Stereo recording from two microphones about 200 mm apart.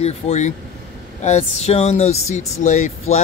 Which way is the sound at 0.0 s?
35° left (ahead or behind).